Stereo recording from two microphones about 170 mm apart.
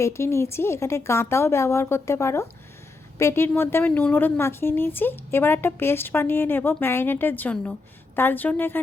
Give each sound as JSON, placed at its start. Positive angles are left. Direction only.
{"t": 0.0, "sound": "a woman's voice", "side_deg": 15}